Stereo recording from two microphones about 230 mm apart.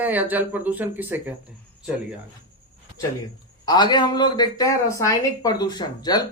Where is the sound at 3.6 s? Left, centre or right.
Centre.